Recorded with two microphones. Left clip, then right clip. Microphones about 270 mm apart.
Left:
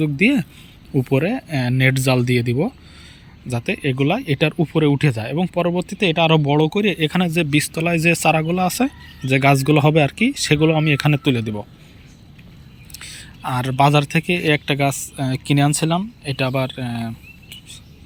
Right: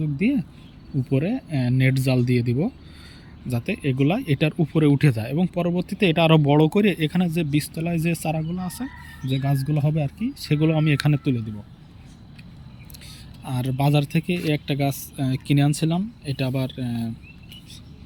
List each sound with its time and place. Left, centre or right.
0.2 s speech: centre
9.4 s speech: left
10.4 s speech: centre
12.9 s speech: centre